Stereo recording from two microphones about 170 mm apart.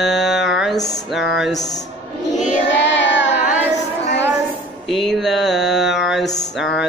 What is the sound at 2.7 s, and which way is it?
Child singing, 90° left.